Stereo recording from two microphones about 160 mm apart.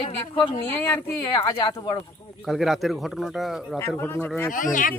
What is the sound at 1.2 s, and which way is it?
Speech, 25° left (ahead or behind).